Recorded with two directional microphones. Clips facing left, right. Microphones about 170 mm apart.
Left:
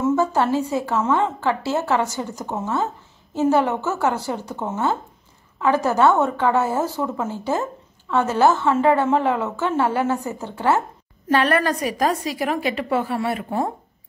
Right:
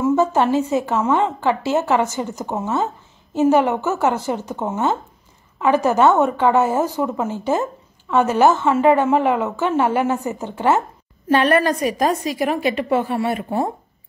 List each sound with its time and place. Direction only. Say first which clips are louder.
0.0 s a woman's voice: right 2 dB; 20° right (ahead or behind)